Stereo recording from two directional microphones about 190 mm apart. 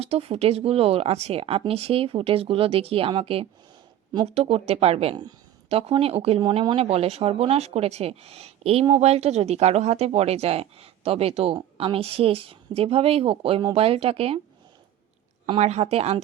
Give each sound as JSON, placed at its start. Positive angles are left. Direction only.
{"t": 0.0, "sound": "a woman's voice", "side_deg": -30}
{"t": 15.4, "sound": "a woman's voice", "side_deg": -35}